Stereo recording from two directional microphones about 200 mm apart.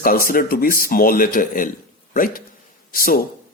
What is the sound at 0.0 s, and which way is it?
A man's voice, 45° left (ahead or behind).